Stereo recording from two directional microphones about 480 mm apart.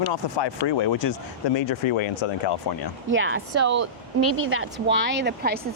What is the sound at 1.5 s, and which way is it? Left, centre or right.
Speech, left.